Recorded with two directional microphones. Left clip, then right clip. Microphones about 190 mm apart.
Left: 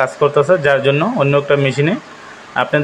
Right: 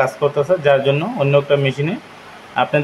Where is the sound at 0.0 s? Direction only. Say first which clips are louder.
Left 3 dB; 15° left (ahead or behind).